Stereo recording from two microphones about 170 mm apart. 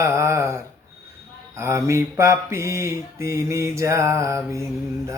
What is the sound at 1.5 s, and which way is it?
Mantra, 15° right (ahead or behind).